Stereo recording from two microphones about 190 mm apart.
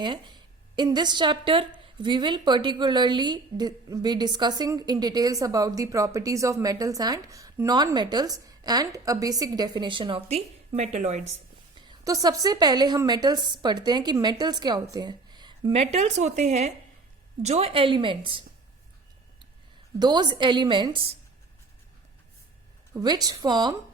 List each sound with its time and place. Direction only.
0.0 s a woman's voice: 25° right (ahead or behind)
11.9 s a woman's voice: 20° right (ahead or behind)
20.0 s a woman's voice: 20° right (ahead or behind)
23.0 s a woman's voice: 20° right (ahead or behind)